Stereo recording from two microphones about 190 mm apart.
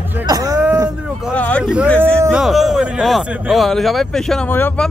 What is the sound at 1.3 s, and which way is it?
Speech, 5° left (ahead or behind).